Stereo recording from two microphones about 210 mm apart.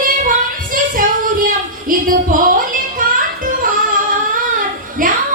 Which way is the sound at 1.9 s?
40° right (ahead or behind).